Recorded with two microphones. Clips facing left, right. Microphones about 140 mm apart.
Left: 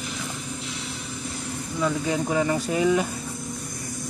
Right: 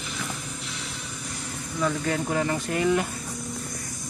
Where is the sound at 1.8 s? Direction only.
10° left (ahead or behind).